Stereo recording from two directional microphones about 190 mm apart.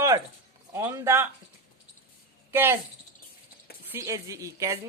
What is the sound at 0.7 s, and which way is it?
Speech, 15° right (ahead or behind).